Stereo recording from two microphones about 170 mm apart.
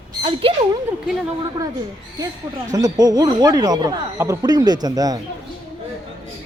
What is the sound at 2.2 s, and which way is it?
Speech, 20° right (ahead or behind).